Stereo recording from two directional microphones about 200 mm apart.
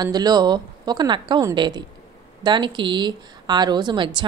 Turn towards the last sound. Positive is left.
turn(degrees=-25)  # may be behind; listen again after turning